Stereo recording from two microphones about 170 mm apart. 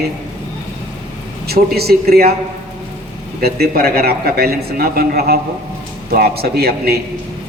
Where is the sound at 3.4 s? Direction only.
65° right (ahead or behind).